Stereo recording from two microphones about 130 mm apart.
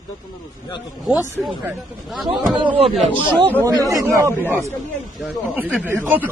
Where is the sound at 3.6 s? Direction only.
25° right (ahead or behind).